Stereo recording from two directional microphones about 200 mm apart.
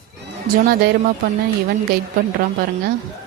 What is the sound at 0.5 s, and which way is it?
Speech, 45° right (ahead or behind).